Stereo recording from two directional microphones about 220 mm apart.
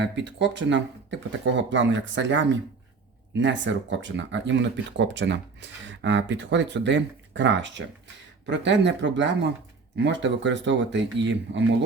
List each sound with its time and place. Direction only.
0.0 s speech: 55° right (ahead or behind)